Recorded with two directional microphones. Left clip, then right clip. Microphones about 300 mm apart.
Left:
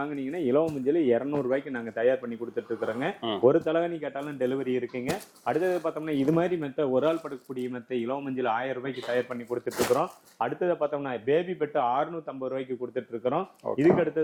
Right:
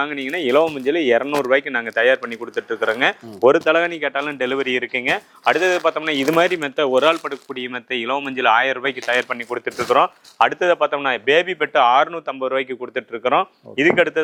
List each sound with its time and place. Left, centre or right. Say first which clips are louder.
0.0 s speech: right 9 dB; centre